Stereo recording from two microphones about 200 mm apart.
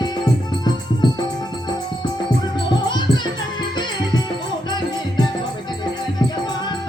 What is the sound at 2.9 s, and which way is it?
Music, 20° left (ahead or behind).